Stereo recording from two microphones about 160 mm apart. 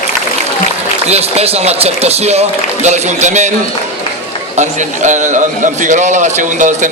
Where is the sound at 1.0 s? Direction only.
40° right (ahead or behind).